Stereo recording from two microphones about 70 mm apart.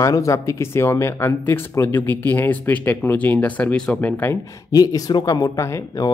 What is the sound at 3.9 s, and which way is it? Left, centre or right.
Speech, left.